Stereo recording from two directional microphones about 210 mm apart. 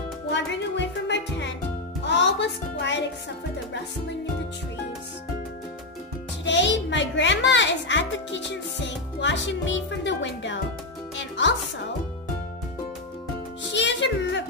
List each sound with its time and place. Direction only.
0.3 s music: 55° left (ahead or behind)
6.4 s a child's voice: 60° left (ahead or behind)
13.7 s music: 60° left (ahead or behind)